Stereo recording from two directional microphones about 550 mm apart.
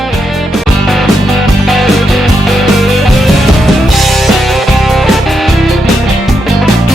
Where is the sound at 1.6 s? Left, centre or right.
Centre.